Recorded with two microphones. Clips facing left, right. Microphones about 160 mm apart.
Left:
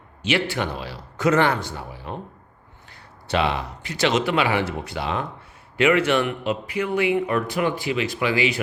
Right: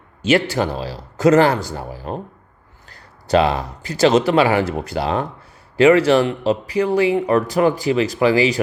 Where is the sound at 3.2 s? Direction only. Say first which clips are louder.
Right 7 dB; 40° right (ahead or behind).